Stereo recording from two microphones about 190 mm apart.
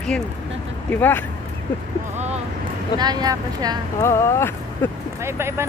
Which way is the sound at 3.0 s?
20° right (ahead or behind).